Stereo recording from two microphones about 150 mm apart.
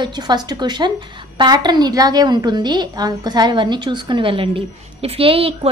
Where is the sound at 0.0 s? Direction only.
30° right (ahead or behind).